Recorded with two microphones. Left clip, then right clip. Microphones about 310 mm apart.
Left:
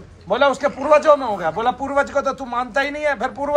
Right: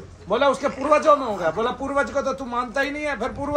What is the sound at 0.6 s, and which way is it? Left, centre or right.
A man's voice, left.